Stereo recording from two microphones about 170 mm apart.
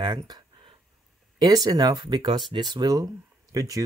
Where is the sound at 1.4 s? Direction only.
20° right (ahead or behind).